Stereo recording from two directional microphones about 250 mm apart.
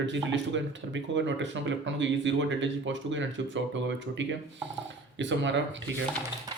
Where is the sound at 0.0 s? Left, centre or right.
Right.